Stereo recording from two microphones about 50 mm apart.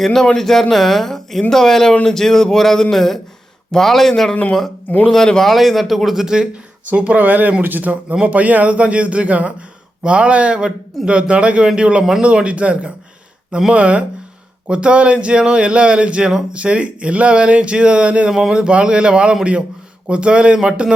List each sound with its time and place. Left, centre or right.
0.0 s speech: centre
5.5 s a man's voice: centre; by 7.2 s right
7.2 s a man's voice: right
18.3 s a man's voice: centre